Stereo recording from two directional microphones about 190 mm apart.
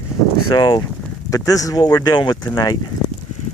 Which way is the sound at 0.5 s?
20° left (ahead or behind).